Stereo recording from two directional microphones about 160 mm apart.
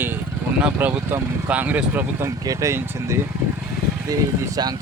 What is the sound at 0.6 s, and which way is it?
Speech, 10° right (ahead or behind).